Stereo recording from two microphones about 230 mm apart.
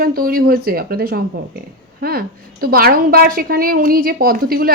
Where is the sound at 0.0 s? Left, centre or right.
Right.